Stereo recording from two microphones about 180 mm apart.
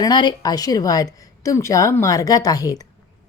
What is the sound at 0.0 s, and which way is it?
A woman's voice, 25° left (ahead or behind).